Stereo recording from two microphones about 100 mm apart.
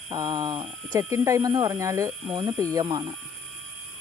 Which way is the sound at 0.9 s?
30° right (ahead or behind).